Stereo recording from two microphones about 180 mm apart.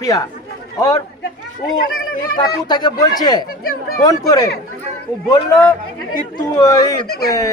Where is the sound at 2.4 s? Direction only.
25° left (ahead or behind).